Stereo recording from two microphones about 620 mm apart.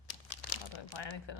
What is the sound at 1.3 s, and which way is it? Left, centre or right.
Speech, left.